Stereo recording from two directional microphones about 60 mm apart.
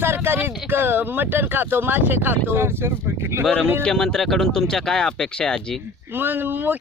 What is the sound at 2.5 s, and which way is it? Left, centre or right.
Speech, right.